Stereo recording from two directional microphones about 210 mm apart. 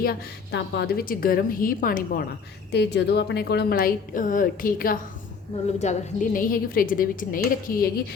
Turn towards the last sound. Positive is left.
turn(degrees=40)  # may be behind; listen again after turning